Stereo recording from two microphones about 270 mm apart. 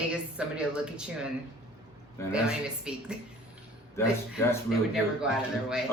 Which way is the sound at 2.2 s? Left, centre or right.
Centre.